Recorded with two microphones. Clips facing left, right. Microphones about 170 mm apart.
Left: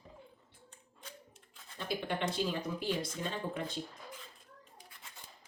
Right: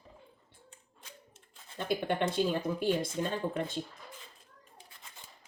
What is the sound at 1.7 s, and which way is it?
Speech, 50° right (ahead or behind).